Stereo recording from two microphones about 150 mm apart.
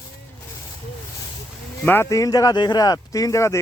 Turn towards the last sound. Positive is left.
turn(degrees=20)  # may be behind; listen again after turning